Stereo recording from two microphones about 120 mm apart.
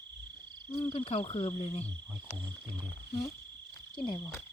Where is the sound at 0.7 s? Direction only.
45° left (ahead or behind).